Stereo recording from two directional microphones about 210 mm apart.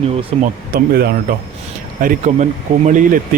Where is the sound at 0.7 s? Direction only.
50° right (ahead or behind).